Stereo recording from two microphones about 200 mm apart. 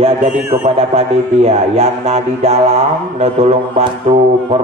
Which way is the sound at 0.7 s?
30° right (ahead or behind).